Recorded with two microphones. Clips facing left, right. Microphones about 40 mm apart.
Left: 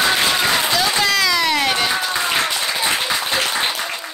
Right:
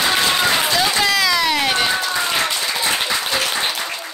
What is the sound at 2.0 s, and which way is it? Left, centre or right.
Applause, centre.